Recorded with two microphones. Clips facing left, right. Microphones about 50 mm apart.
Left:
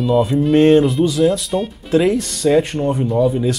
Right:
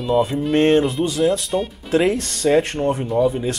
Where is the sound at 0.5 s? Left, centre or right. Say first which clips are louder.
Left 4 dB; right.